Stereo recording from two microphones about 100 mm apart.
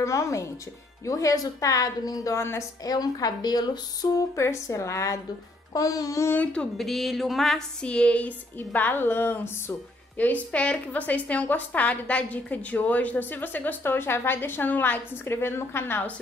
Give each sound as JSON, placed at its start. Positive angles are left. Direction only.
{"t": 0.0, "sound": "a woman's voice", "side_deg": 30}
{"t": 4.4, "sound": "a woman's voice", "side_deg": 30}
{"t": 6.3, "sound": "speech", "side_deg": 15}